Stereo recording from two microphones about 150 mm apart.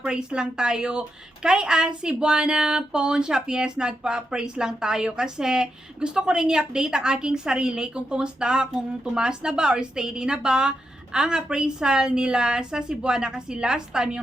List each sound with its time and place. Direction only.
0.0 s speech: 5° right (ahead or behind)